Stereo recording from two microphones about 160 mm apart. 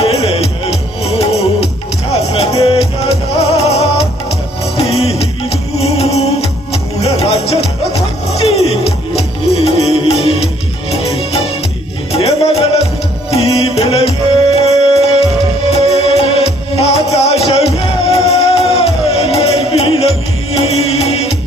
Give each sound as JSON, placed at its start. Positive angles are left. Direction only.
{"t": 0.0, "sound": "music", "side_deg": 40}